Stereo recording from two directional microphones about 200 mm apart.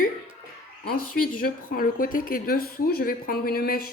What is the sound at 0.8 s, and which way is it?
Speech, 50° left (ahead or behind).